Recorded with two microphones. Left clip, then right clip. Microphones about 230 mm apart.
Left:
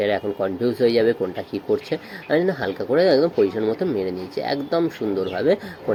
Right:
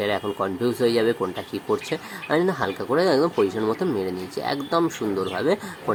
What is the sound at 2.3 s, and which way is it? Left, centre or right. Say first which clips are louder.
Speech: left 2 dB; right.